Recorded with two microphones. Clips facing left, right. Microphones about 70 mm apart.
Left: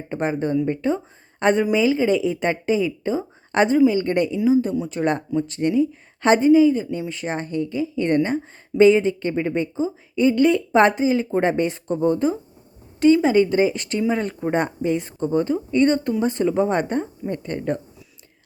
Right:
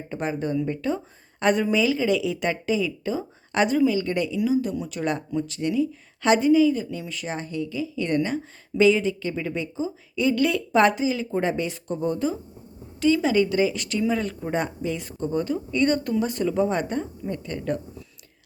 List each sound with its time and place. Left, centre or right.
0.1 s a woman's voice: left
4.4 s a woman's voice: left